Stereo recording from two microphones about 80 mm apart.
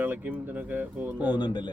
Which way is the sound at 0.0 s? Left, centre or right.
Right.